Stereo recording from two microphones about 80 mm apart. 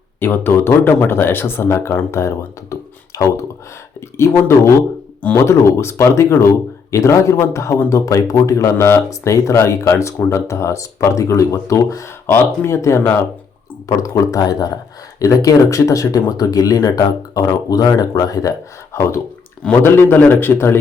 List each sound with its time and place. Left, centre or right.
0.2 s speech: left
3.1 s a sound: left
4.2 s speech: left
12.2 s speech: left
18.9 s speech: left